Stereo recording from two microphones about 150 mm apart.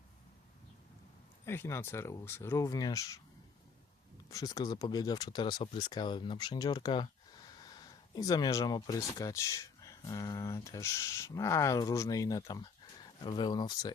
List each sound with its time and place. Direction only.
1.5 s speech: 15° left (ahead or behind)
4.3 s speech: 25° left (ahead or behind)